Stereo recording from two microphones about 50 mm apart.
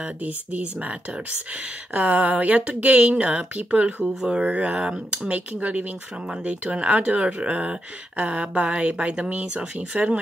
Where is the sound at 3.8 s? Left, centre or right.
Centre.